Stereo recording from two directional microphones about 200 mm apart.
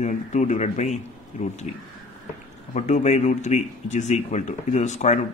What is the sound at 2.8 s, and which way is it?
Speech, 35° left (ahead or behind).